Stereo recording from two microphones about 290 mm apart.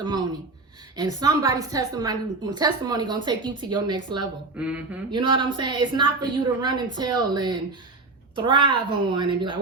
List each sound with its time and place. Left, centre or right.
0.0 s a woman's voice: centre
4.5 s speech: centre
5.1 s a woman's voice: centre